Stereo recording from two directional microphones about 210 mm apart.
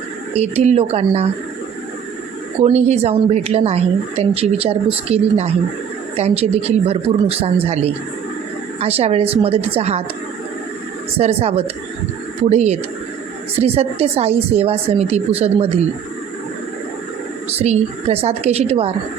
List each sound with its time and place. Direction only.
0.3 s speech: 30° right (ahead or behind)
2.6 s speech: 30° right (ahead or behind)
11.2 s speech: 30° right (ahead or behind)
17.6 s speech: 30° right (ahead or behind)